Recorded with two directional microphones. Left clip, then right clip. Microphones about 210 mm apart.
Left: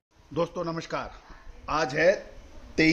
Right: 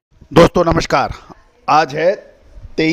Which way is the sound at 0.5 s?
50° right (ahead or behind).